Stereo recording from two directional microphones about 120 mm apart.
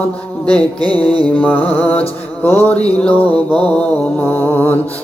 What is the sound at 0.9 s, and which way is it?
Mantra, 50° left (ahead or behind).